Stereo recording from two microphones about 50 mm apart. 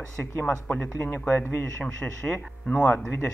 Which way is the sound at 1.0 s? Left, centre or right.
Left.